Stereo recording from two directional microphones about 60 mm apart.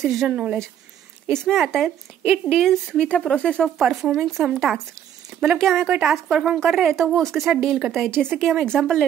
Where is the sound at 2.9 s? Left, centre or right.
Centre.